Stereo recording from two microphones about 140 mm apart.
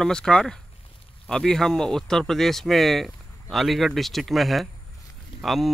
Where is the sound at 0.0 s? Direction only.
5° left (ahead or behind).